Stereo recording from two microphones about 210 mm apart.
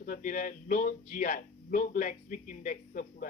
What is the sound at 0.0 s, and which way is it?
Speech, 40° left (ahead or behind).